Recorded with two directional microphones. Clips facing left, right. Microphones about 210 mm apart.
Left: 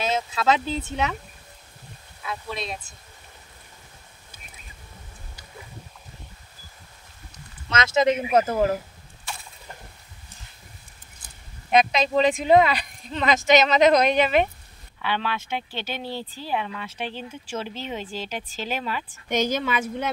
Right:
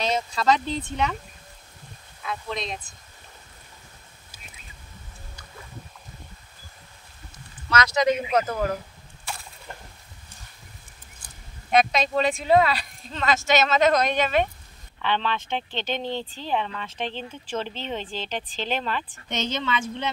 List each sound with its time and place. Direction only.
0.0 s speech: 5° left (ahead or behind)
7.7 s speech: 25° left (ahead or behind)
11.9 s speech: 15° left (ahead or behind)